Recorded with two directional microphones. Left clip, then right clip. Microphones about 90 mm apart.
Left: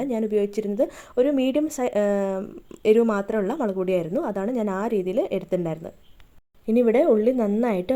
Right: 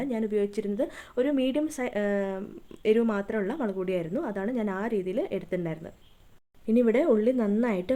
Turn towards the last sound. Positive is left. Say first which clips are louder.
# left 4 dB
turn(degrees=30)  # may be behind; listen again after turning